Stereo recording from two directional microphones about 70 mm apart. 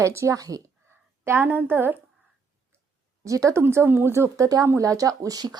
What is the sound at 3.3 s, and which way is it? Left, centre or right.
Speech, right.